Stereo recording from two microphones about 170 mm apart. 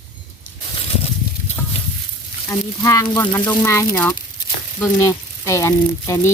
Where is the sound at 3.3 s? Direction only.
15° left (ahead or behind).